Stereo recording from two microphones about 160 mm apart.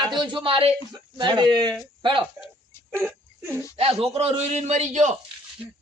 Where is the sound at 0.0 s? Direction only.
30° right (ahead or behind).